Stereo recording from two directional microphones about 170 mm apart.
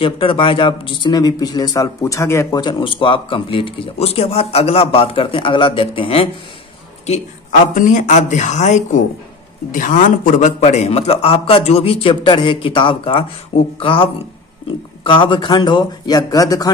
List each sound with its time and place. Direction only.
0.0 s speech: 30° left (ahead or behind)
7.1 s speech: 50° left (ahead or behind); by 16.7 s 20° left (ahead or behind)